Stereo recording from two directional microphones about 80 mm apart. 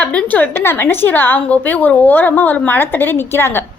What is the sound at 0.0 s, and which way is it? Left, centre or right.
A child's voice, centre.